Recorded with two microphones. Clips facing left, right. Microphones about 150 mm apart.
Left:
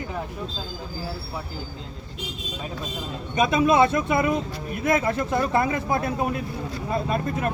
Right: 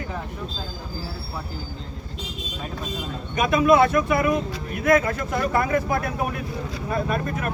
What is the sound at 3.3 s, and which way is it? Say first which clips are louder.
Speech: right 1 dB; 25° left (ahead or behind).